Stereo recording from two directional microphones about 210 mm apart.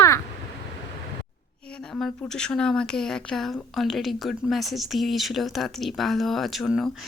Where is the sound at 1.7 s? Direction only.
5° left (ahead or behind).